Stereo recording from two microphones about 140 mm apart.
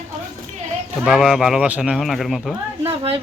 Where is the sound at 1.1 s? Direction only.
5° right (ahead or behind).